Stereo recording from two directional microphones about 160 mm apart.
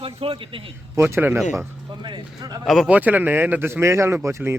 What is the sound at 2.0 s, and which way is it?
Speech, 25° right (ahead or behind).